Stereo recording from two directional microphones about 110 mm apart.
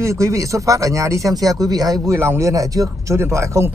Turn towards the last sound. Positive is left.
turn(degrees=-25)  # may be behind; listen again after turning